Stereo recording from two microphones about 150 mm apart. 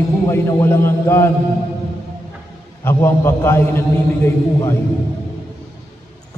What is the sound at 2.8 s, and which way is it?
A man's voice, 15° left (ahead or behind).